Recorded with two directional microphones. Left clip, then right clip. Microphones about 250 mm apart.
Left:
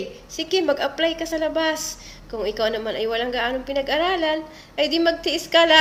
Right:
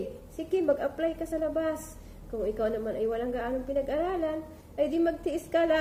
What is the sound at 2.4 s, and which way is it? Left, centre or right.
A woman's voice, left.